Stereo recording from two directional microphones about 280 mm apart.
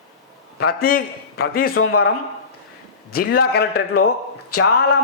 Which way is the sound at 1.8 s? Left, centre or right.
Left.